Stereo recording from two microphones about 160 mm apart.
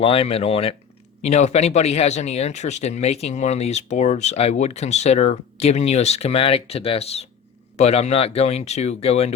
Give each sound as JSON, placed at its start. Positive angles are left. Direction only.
{"t": 0.0, "sound": "speech", "side_deg": 35}